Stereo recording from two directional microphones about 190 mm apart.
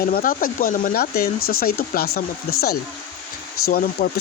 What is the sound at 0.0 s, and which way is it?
Speech, 50° left (ahead or behind).